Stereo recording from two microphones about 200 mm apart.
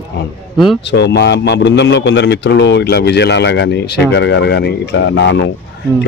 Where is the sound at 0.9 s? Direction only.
60° left (ahead or behind).